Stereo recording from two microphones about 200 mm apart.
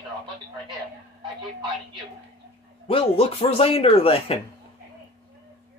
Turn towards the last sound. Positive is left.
turn(degrees=30)  # may be behind; listen again after turning